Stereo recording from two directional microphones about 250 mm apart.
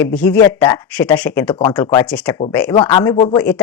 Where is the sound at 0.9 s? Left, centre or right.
Centre.